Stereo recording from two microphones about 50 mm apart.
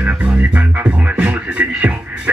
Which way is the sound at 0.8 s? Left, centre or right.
Right.